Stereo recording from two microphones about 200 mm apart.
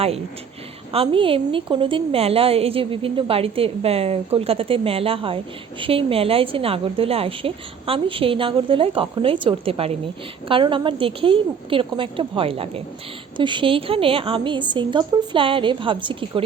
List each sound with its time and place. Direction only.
0.9 s a woman's voice: 25° right (ahead or behind)